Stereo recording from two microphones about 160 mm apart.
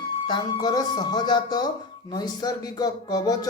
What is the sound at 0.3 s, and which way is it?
Speech, 30° left (ahead or behind).